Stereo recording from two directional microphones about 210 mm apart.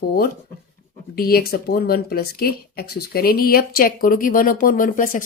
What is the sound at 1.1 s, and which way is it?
Speech, 45° left (ahead or behind).